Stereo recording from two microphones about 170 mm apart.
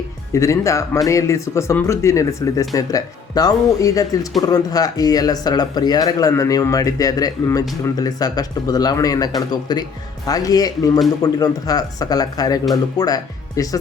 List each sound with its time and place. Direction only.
0.3 s speech: 15° left (ahead or behind)